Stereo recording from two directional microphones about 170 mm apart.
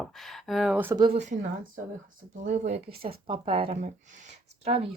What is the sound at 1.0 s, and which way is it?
Speech, 40° right (ahead or behind).